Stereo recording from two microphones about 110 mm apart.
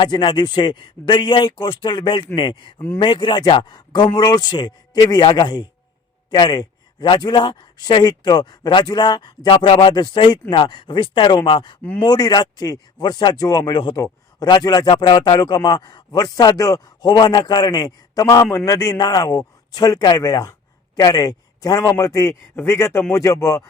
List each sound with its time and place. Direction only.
0.0 s speech: 45° left (ahead or behind)
2.7 s a man's voice: 20° left (ahead or behind)
3.0 s a man's voice: 50° left (ahead or behind)
11.8 s speech: 15° left (ahead or behind)
12.0 s a man's voice: 35° left (ahead or behind)